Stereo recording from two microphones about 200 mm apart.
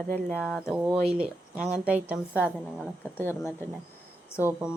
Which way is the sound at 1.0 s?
5° right (ahead or behind).